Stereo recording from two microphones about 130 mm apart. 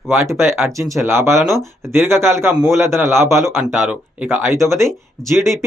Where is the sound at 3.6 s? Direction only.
10° right (ahead or behind).